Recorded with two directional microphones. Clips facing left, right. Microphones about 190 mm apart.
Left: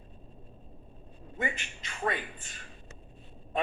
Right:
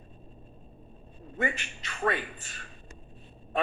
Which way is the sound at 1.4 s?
20° left (ahead or behind).